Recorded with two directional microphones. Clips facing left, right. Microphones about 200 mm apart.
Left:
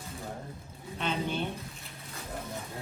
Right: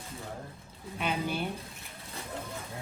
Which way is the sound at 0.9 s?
10° right (ahead or behind).